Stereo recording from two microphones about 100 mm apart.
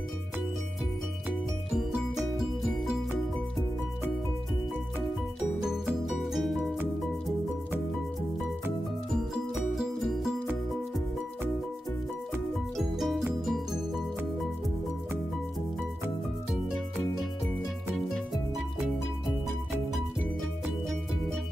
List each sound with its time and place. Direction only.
5.6 s music: 5° right (ahead or behind)
9.1 s music: 5° right (ahead or behind)
12.7 s music: centre (ahead or behind)